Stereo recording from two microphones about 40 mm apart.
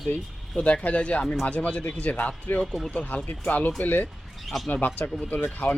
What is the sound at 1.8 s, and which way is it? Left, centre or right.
Speech, left.